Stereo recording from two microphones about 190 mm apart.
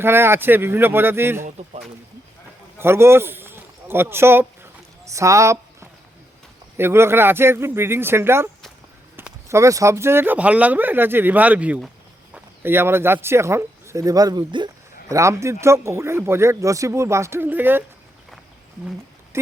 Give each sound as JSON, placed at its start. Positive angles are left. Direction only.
{"t": 0.0, "sound": "speech", "side_deg": -10}
{"t": 2.7, "sound": "a man's voice", "side_deg": -15}
{"t": 5.0, "sound": "a sound", "side_deg": -15}
{"t": 6.7, "sound": "speech", "side_deg": -10}
{"t": 12.3, "sound": "a sound", "side_deg": -10}
{"t": 13.2, "sound": "speech", "side_deg": -15}